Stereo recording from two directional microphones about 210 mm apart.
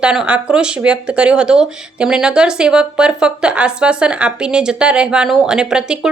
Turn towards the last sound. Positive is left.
turn(degrees=-5)  # may be behind; listen again after turning